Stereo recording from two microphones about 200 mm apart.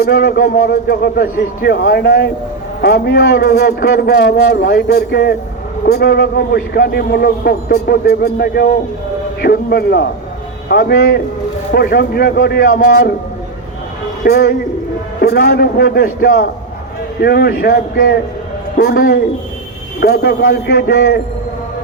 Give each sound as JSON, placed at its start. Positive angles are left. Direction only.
{"t": 0.0, "sound": "a man's voice", "side_deg": 55}
{"t": 14.3, "sound": "a man's voice", "side_deg": 55}